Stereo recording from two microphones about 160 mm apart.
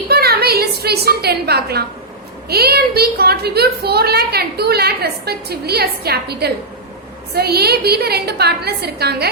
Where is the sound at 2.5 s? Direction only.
80° right.